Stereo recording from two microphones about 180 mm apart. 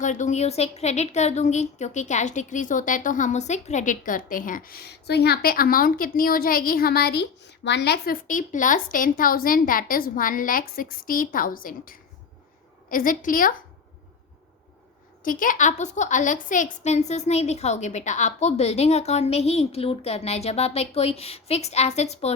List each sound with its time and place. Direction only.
0.0 s a woman's voice: 40° left (ahead or behind)
15.2 s a woman's voice: 50° left (ahead or behind)